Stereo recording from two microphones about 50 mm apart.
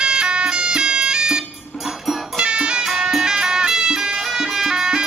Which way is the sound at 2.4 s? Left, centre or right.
Centre.